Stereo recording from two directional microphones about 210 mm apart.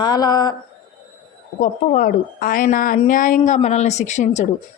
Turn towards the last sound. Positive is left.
turn(degrees=35)  # may be behind; listen again after turning